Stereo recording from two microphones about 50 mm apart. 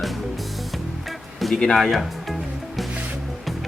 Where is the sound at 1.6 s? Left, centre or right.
Centre.